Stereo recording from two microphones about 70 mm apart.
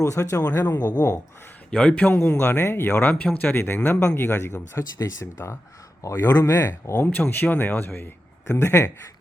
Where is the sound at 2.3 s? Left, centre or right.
Left.